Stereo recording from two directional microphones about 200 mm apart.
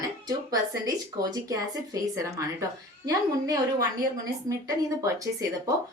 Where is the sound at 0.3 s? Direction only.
20° right (ahead or behind).